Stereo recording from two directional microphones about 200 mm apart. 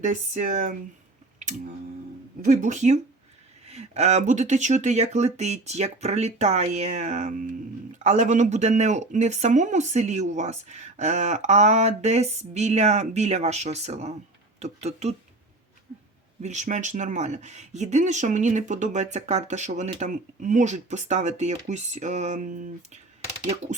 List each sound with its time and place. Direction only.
0.0 s speech: 40° right (ahead or behind)
1.4 s a sound: 35° right (ahead or behind)
2.5 s speech: 35° right (ahead or behind)
16.4 s speech: 35° right (ahead or behind)